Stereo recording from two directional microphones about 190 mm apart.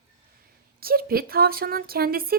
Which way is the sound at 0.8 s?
50° right (ahead or behind).